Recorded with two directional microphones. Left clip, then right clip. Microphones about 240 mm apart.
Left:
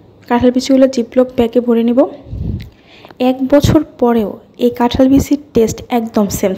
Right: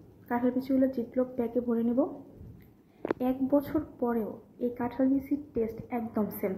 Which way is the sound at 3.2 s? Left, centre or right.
Left.